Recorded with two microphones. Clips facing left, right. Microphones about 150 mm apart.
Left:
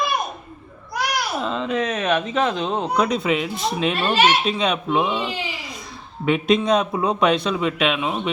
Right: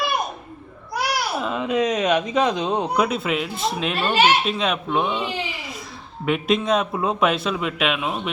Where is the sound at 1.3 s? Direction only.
10° right (ahead or behind).